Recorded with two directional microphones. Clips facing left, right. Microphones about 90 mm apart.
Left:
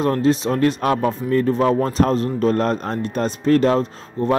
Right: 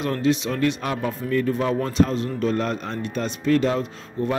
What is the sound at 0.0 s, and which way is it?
Speech, 40° left (ahead or behind).